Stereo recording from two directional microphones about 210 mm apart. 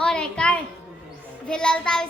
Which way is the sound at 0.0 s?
5° left (ahead or behind).